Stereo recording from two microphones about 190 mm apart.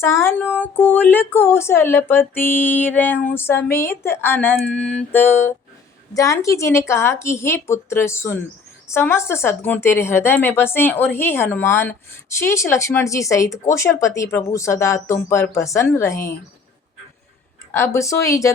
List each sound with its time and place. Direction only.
0.0 s speech: 15° left (ahead or behind)
17.7 s speech: 15° left (ahead or behind)